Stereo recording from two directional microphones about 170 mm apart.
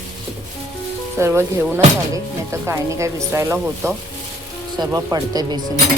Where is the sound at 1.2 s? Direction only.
15° right (ahead or behind).